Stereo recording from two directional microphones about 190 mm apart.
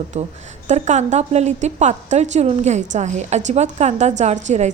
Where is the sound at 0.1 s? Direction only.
35° right (ahead or behind).